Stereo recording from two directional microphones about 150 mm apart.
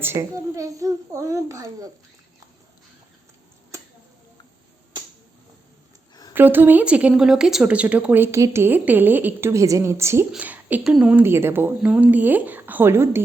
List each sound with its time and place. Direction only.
0.0 s a child's voice: 20° right (ahead or behind)
3.7 s a sound: 20° right (ahead or behind)
6.3 s a woman's voice: 15° right (ahead or behind)